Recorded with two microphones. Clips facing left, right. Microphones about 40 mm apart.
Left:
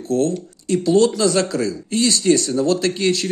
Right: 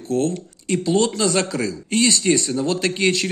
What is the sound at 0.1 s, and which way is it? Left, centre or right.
Speech, right.